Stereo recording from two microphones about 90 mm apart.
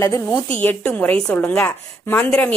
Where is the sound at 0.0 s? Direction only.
35° left (ahead or behind).